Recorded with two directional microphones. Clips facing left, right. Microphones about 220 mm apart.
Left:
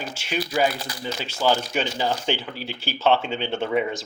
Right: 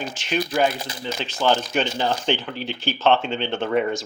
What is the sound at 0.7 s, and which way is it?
Speech, 20° right (ahead or behind).